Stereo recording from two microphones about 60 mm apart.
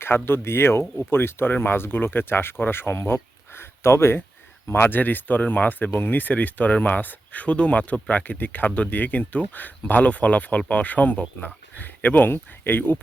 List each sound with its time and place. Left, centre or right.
0.0 s speech: left